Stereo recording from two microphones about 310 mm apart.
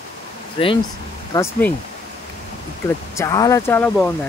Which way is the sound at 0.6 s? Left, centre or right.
Centre.